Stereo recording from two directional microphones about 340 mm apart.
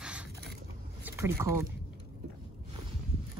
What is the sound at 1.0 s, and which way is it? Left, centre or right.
Boat, centre.